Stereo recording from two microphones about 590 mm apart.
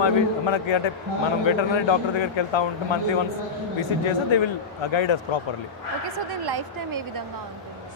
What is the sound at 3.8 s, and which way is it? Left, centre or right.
Speech, left.